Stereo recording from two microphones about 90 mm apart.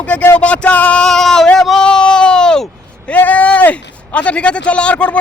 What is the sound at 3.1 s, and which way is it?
Speech, 15° left (ahead or behind).